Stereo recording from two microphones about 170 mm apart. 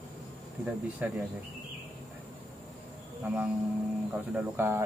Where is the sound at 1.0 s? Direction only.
10° right (ahead or behind).